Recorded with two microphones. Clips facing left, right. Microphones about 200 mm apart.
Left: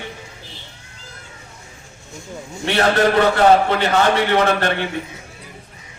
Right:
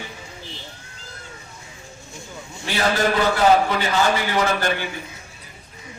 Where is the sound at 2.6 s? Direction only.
65° left (ahead or behind).